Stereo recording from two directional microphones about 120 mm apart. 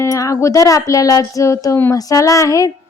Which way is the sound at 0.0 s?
30° left (ahead or behind).